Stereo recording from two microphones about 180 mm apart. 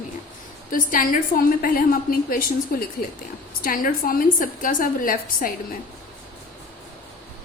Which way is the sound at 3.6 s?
50° left (ahead or behind).